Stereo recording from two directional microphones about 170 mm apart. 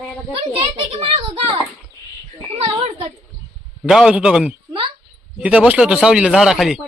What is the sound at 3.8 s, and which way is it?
Speech, 5° right (ahead or behind).